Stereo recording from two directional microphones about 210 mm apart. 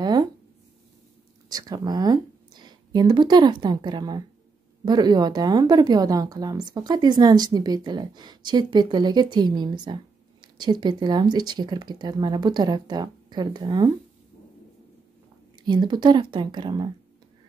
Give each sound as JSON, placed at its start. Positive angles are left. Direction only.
{"t": 0.0, "sound": "a sound", "side_deg": -20}
{"t": 1.5, "sound": "speech", "side_deg": -15}
{"t": 15.6, "sound": "speech", "side_deg": -20}